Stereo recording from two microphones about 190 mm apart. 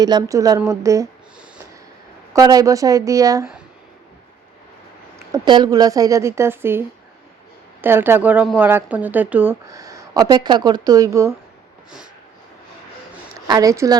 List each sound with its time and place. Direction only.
0.0 s a woman's voice: 20° right (ahead or behind)
2.3 s a woman's voice: 20° right (ahead or behind)
5.3 s a woman's voice: 20° right (ahead or behind)
13.5 s a woman's voice: 20° right (ahead or behind)